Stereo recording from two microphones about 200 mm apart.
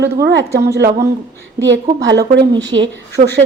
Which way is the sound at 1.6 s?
65° right (ahead or behind).